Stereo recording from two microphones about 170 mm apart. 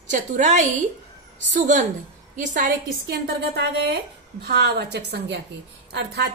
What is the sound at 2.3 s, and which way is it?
Speech, 50° right (ahead or behind).